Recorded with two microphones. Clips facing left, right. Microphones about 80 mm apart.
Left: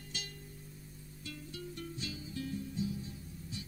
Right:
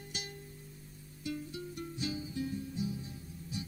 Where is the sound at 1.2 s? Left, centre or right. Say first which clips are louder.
Right 6 dB; right.